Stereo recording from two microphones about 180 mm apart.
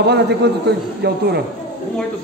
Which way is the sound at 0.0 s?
70° right (ahead or behind).